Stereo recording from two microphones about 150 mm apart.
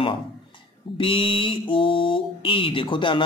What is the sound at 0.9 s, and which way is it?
A man's voice, 35° left (ahead or behind).